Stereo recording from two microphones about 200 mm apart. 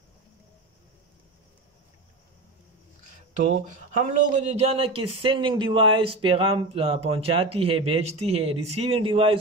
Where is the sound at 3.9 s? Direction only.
35° right (ahead or behind).